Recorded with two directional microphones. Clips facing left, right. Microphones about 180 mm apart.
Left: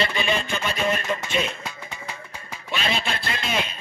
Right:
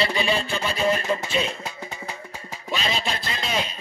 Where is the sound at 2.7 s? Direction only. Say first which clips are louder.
Even; 40° right (ahead or behind).